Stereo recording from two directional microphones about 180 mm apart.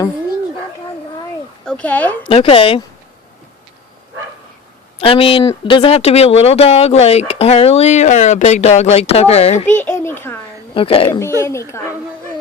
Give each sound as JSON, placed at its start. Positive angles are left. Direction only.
{"t": 1.6, "sound": "speech", "side_deg": 10}
{"t": 2.2, "sound": "speech", "side_deg": 30}
{"t": 4.9, "sound": "speech", "side_deg": 30}
{"t": 9.7, "sound": "a child's voice", "side_deg": 10}
{"t": 10.8, "sound": "speech", "side_deg": 30}
{"t": 11.3, "sound": "a child's voice", "side_deg": 15}